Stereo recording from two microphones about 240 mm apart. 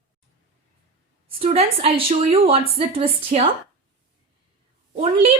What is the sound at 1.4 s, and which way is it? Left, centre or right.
A woman's voice, right.